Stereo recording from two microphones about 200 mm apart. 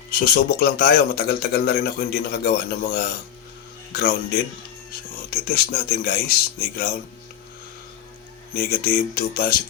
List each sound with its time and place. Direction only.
0.1 s speech: 45° left (ahead or behind)
5.3 s speech: 50° left (ahead or behind)
8.5 s speech: 50° left (ahead or behind)